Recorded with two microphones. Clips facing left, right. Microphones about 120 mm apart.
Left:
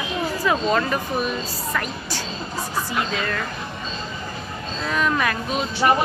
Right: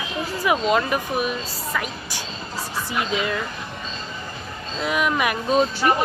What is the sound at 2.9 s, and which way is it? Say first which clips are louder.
Speech: right 5 dB; 15° right (ahead or behind).